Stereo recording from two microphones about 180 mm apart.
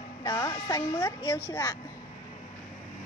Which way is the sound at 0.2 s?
20° left (ahead or behind).